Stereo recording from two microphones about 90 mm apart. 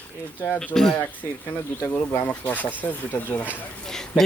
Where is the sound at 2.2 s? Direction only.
20° left (ahead or behind).